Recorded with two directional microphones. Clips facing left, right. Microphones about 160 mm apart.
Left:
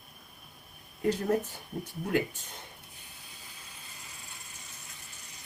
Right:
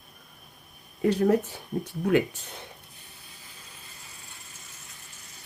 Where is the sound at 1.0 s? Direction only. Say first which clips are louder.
Right 6 dB; 75° right (ahead or behind).